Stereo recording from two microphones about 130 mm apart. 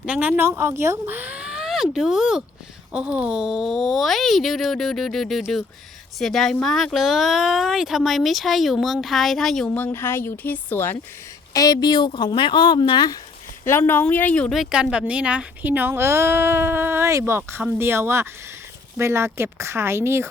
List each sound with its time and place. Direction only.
0.0 s speech: 10° right (ahead or behind)
9.7 s speech: 15° left (ahead or behind)
11.5 s speech: 30° left (ahead or behind)
13.7 s speech: 15° left (ahead or behind); by 20.2 s 20° right (ahead or behind)